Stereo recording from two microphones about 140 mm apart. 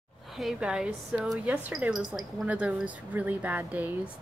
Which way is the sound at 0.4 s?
5° right (ahead or behind).